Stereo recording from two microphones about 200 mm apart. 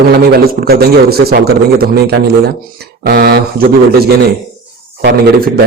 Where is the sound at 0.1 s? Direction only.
50° right (ahead or behind).